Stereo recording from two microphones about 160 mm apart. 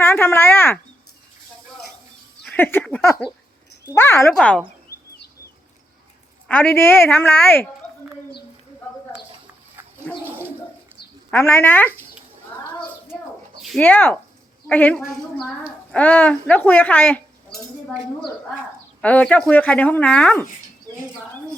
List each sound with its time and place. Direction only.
0.0 s speech: 15° left (ahead or behind)
2.4 s speech: 10° left (ahead or behind)
4.4 s speech: 5° left (ahead or behind)
6.5 s speech: 10° left (ahead or behind)
8.9 s a sound: 15° left (ahead or behind)
10.2 s a sound: 15° right (ahead or behind)
11.3 s speech: 15° left (ahead or behind)
13.6 s a sound: centre (ahead or behind)
13.8 s speech: 10° left (ahead or behind)
19.0 s speech: 10° left (ahead or behind)